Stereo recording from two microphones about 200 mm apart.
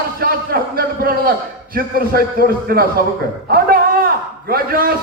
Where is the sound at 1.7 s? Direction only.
45° right (ahead or behind).